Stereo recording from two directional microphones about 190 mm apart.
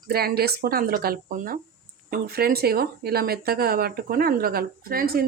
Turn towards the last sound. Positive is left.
turn(degrees=-50)  # may be behind; listen again after turning